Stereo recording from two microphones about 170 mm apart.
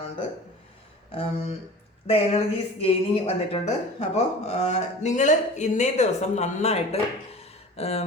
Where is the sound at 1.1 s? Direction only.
35° left (ahead or behind).